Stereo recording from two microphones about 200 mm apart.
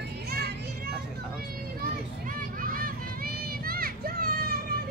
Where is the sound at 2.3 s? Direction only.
45° right (ahead or behind).